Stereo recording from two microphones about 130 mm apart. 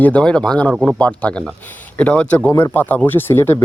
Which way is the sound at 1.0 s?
10° left (ahead or behind).